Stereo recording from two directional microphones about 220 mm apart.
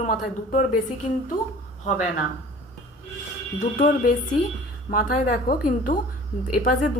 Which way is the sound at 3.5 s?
45° left (ahead or behind).